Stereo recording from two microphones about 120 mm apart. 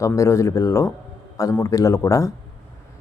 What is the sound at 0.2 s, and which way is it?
Speech, 25° left (ahead or behind).